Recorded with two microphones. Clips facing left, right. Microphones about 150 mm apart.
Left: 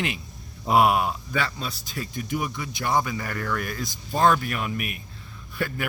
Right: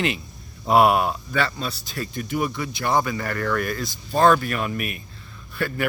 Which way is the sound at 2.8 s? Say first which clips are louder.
Right 2 dB; 70° right (ahead or behind).